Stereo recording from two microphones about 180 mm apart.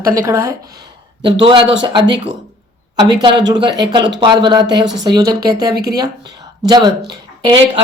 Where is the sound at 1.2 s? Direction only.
30° right (ahead or behind).